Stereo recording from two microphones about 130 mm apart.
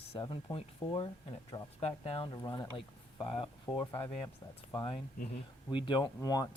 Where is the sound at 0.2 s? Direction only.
30° left (ahead or behind).